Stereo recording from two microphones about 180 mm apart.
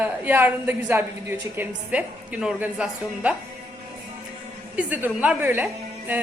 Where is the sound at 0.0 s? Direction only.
10° right (ahead or behind).